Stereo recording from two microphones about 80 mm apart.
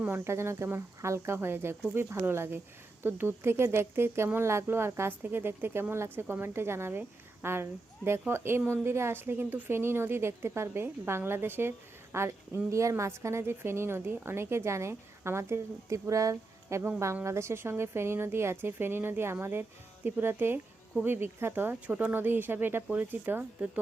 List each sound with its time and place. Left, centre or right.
0.0 s a woman's voice: right